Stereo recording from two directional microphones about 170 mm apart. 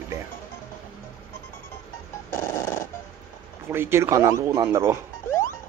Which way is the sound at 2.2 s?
15° left (ahead or behind).